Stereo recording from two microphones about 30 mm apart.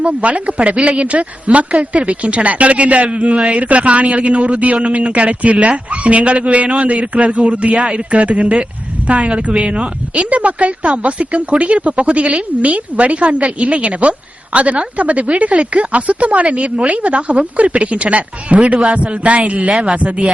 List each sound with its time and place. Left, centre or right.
0.0 s a man's voice: right
10.2 s a man's voice: right